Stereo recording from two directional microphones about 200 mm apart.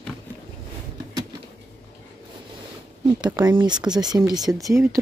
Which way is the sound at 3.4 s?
20° right (ahead or behind).